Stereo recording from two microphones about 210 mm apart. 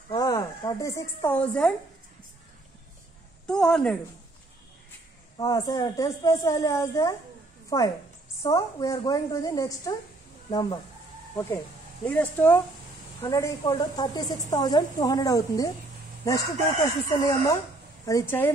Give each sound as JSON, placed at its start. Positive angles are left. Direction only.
{"t": 0.1, "sound": "a woman's voice", "side_deg": 15}
{"t": 3.4, "sound": "a woman's voice", "side_deg": 5}
{"t": 5.4, "sound": "speech", "side_deg": 15}